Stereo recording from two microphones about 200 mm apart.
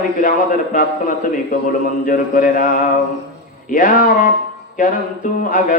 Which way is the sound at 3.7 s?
40° left (ahead or behind).